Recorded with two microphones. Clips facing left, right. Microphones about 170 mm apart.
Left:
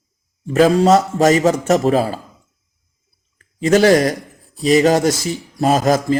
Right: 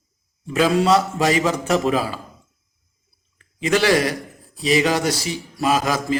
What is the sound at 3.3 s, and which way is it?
A man's voice, 45° left (ahead or behind).